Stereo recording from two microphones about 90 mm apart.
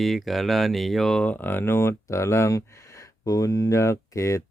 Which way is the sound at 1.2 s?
20° left (ahead or behind).